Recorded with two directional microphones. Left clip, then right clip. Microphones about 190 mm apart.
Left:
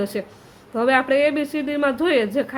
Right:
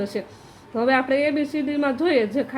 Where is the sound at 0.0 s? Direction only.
15° left (ahead or behind).